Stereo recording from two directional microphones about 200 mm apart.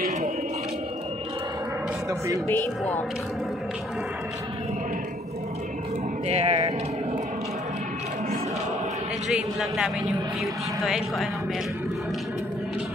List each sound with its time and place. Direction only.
2.0 s speech: 15° right (ahead or behind)
2.4 s a woman's voice: 10° left (ahead or behind)
6.2 s speech: 30° right (ahead or behind)
9.3 s a woman's voice: centre (ahead or behind)